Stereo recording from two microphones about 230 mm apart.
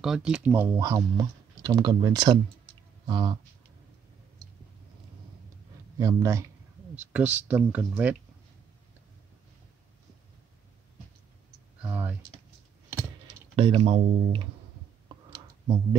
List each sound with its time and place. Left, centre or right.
0.0 s speech: centre
5.9 s speech: centre
11.8 s speech: centre
13.6 s speech: right